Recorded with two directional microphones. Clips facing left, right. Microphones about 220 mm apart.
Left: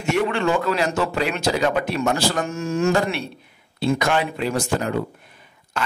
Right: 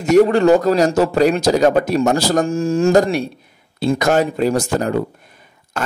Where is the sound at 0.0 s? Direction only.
40° right (ahead or behind).